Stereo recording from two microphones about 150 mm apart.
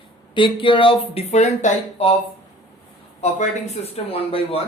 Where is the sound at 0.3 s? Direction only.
35° left (ahead or behind).